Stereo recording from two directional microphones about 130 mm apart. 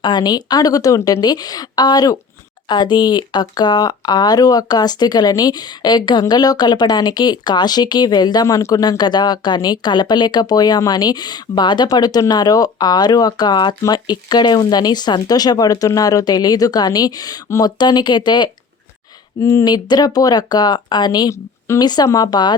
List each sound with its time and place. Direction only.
0.0 s speech: 35° left (ahead or behind)
19.4 s speech: 25° left (ahead or behind)